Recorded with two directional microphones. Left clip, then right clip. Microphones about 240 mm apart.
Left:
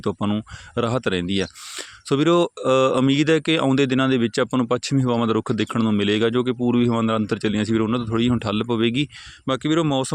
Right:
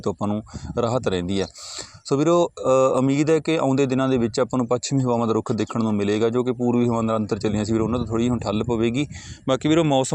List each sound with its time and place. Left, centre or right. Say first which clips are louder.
0.0 s speech: left 1 dB; centre
9.5 s speech: right 2 dB; centre